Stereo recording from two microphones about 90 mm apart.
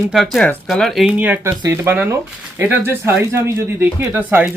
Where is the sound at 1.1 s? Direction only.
15° right (ahead or behind).